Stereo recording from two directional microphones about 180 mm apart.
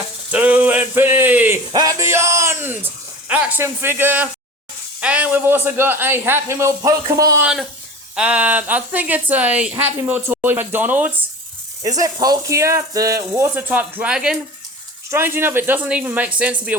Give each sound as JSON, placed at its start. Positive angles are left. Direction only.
{"t": 0.3, "sound": "a sound", "side_deg": -10}
{"t": 4.9, "sound": "a man's voice", "side_deg": -10}
{"t": 8.1, "sound": "a man's voice", "side_deg": -5}
{"t": 11.9, "sound": "a man's voice", "side_deg": -20}